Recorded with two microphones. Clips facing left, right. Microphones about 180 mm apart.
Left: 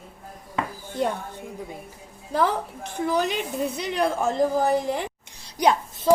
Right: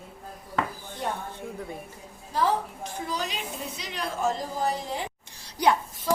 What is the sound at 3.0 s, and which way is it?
A woman's voice, 55° left (ahead or behind).